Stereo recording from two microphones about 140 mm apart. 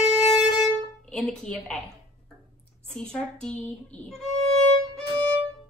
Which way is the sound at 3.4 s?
5° left (ahead or behind).